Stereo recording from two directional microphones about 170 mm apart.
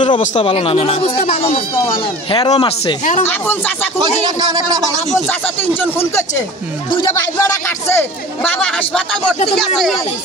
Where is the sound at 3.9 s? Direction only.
25° right (ahead or behind).